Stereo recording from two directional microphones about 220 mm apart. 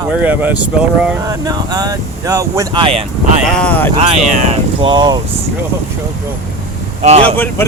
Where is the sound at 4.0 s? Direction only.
30° right (ahead or behind).